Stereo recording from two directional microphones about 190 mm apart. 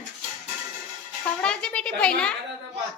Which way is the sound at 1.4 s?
5° left (ahead or behind).